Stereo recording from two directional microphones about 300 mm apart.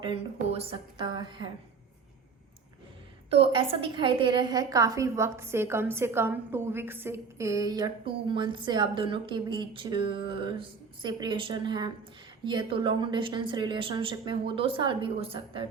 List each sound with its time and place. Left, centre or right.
0.0 s a woman's voice: centre
3.2 s a woman's voice: centre